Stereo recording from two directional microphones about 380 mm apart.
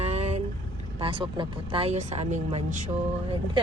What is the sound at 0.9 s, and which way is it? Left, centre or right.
Speech, centre.